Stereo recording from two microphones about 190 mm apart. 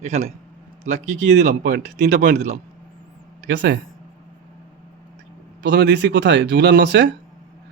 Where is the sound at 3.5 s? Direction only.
65° right (ahead or behind).